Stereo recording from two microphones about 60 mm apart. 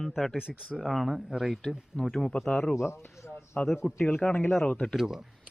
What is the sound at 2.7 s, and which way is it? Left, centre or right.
Speech, left.